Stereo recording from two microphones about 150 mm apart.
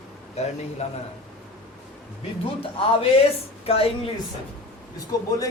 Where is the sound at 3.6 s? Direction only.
40° left (ahead or behind).